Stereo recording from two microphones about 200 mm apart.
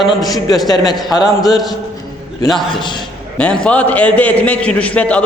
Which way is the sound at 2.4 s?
Centre (ahead or behind).